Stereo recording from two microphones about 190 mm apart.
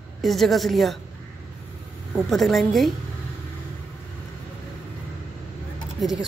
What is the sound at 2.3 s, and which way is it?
Speech, centre (ahead or behind).